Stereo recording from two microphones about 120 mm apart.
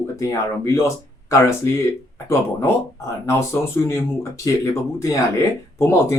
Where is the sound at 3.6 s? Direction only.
15° left (ahead or behind).